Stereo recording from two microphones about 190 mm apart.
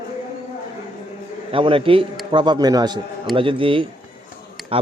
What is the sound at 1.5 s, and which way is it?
A man's voice, 30° right (ahead or behind).